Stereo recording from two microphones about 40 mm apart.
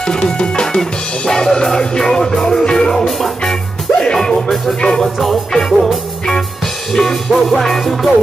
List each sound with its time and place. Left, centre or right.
0.0 s music: left
2.9 s music: centre
6.9 s music: centre